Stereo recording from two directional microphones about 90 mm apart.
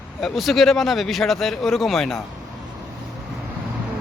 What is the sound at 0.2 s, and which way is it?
Speech, centre (ahead or behind).